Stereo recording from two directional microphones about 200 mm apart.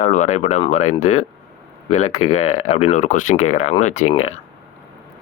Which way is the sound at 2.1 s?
90° left.